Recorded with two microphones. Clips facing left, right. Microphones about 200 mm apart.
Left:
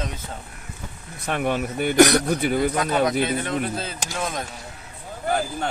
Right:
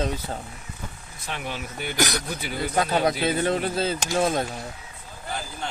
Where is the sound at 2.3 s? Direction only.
50° left (ahead or behind).